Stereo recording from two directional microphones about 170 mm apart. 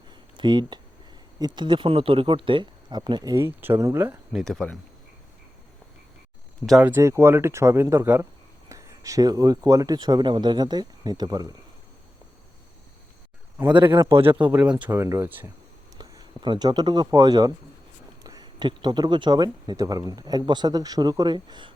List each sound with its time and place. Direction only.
0.3 s speech: 25° right (ahead or behind)
4.3 s speech: centre (ahead or behind)
6.7 s speech: 5° right (ahead or behind)
6.9 s speech: 15° right (ahead or behind)
13.7 s speech: 30° right (ahead or behind)
13.9 s speech: 15° right (ahead or behind)
14.2 s speech: 30° right (ahead or behind)
14.4 s speech: 10° right (ahead or behind); by 21.7 s 25° right (ahead or behind)